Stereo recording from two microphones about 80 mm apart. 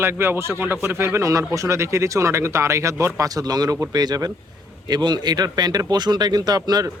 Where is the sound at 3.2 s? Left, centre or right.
Right.